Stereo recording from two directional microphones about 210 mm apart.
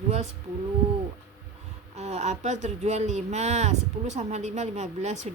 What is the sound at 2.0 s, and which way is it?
Speech, 35° right (ahead or behind).